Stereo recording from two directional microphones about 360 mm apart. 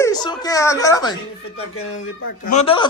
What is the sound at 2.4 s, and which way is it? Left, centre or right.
Speech, centre.